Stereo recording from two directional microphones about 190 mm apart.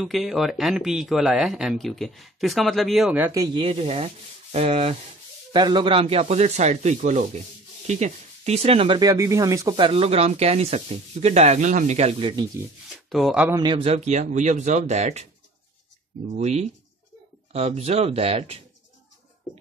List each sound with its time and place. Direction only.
0.0 s speech: centre (ahead or behind)
3.5 s speech: 30° right (ahead or behind)
13.1 s speech: centre (ahead or behind)
13.6 s speech: 25° right (ahead or behind)
16.3 s speech: 35° right (ahead or behind)